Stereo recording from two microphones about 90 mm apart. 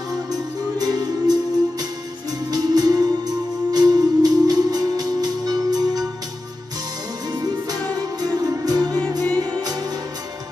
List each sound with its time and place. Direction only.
0.1 s music: 45° right (ahead or behind)
8.2 s music: 45° right (ahead or behind)